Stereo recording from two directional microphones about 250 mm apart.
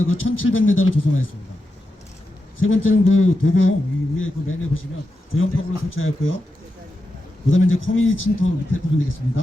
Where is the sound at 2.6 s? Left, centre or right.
Left.